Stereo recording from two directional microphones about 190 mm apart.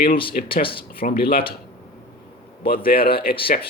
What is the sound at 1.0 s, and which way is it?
Speech, 50° left (ahead or behind).